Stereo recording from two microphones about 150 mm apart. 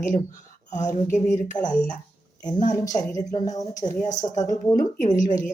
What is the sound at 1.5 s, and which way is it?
Speech, 30° left (ahead or behind).